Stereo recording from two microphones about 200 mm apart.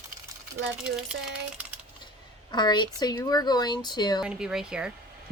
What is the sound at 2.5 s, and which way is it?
Speech, 20° left (ahead or behind).